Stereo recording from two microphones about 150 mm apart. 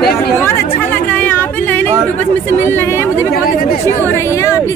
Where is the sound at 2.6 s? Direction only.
15° left (ahead or behind).